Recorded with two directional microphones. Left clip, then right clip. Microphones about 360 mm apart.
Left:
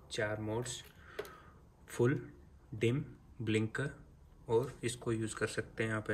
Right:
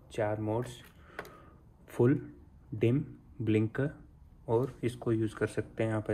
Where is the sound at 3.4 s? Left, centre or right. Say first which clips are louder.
Right 5 dB; centre.